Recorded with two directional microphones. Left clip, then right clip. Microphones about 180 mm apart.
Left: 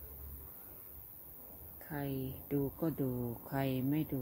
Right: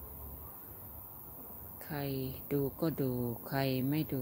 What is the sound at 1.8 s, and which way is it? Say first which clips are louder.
Speech: right 2 dB; centre (ahead or behind).